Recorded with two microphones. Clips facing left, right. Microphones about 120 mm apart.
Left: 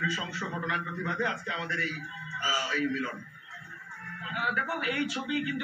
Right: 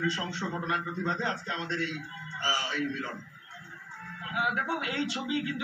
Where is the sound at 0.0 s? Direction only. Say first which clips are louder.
Right 2 dB; 25° right (ahead or behind).